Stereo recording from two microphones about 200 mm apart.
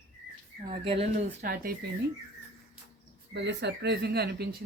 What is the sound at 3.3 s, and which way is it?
Speech, 60° right (ahead or behind).